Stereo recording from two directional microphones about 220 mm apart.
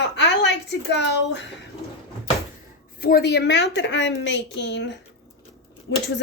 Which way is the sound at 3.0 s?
45° left (ahead or behind).